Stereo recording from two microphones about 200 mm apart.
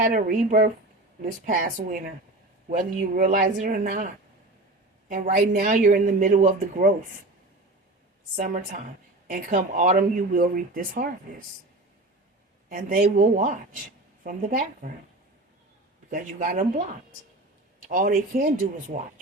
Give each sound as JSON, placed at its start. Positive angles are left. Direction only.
{"t": 0.0, "sound": "speech", "side_deg": -45}
{"t": 8.4, "sound": "speech", "side_deg": -40}
{"t": 12.6, "sound": "speech", "side_deg": -45}
{"t": 16.0, "sound": "speech", "side_deg": -45}